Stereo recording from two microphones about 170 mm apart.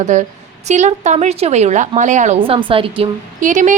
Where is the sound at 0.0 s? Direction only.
45° right (ahead or behind).